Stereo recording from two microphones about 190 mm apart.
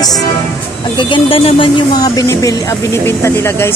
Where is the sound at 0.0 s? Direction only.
20° left (ahead or behind).